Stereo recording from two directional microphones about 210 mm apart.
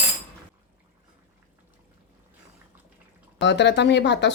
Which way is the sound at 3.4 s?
60° left (ahead or behind).